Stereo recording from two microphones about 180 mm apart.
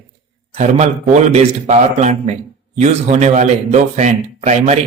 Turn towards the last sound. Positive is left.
turn(degrees=-40)  # may be behind; listen again after turning